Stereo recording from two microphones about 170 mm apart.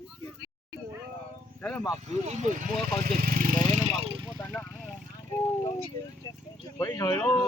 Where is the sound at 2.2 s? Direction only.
45° right (ahead or behind).